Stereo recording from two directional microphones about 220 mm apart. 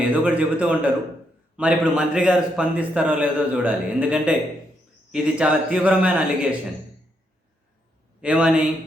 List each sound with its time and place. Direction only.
0.1 s a man's voice: 5° right (ahead or behind)
8.2 s a man's voice: 5° right (ahead or behind)